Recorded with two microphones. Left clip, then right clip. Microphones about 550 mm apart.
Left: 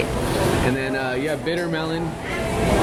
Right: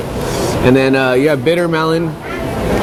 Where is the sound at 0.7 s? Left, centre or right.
Right.